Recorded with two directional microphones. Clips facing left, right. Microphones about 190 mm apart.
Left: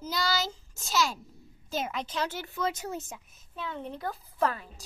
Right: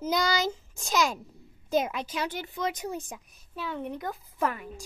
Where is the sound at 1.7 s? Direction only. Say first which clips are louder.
Right 5 dB; 10° right (ahead or behind).